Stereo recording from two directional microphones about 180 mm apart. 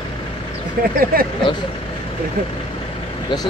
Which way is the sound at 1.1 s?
55° right (ahead or behind).